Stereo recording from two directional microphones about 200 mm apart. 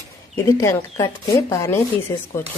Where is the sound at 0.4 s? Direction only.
15° left (ahead or behind).